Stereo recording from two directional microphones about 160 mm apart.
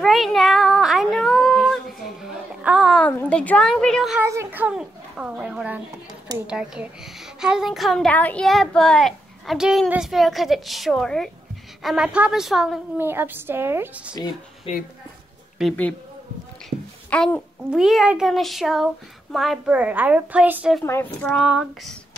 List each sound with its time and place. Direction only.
0.0 s a sound: centre (ahead or behind)
3.0 s a woman's voice: 10° left (ahead or behind)
4.2 s a child's voice: 15° right (ahead or behind)
13.0 s a child's voice: 15° right (ahead or behind)
14.7 s a woman's voice: 40° left (ahead or behind)
15.6 s a woman's voice: 5° right (ahead or behind)
17.1 s a woman's voice: 10° left (ahead or behind)
17.6 s a child's voice: 5° right (ahead or behind)
20.8 s a child's voice: 10° left (ahead or behind)